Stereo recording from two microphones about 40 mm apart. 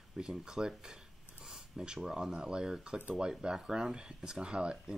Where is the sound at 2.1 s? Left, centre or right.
Centre.